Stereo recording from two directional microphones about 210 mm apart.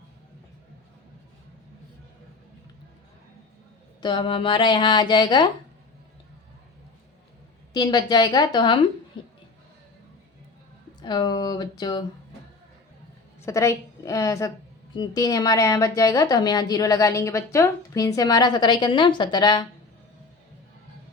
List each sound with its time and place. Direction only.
4.0 s speech: 25° left (ahead or behind)
7.7 s speech: 20° left (ahead or behind)
11.0 s speech: 20° left (ahead or behind)
13.4 s a woman's voice: 15° left (ahead or behind)